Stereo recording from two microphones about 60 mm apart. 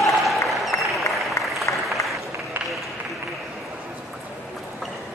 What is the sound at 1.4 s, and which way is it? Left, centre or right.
Applause, left.